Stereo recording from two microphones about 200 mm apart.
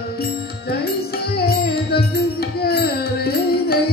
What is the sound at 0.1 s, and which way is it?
Music, 50° left (ahead or behind).